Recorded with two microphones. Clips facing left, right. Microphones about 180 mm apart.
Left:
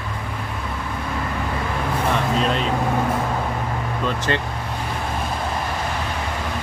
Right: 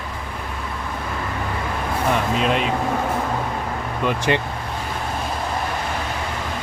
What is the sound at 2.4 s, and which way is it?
Speech, 5° right (ahead or behind).